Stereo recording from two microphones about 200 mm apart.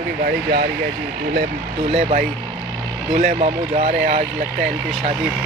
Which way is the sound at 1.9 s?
35° right (ahead or behind).